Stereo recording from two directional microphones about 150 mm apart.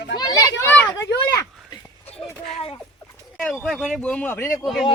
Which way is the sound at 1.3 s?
25° left (ahead or behind).